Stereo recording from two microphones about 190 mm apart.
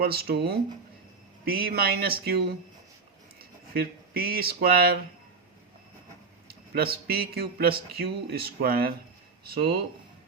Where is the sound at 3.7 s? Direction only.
50° right (ahead or behind).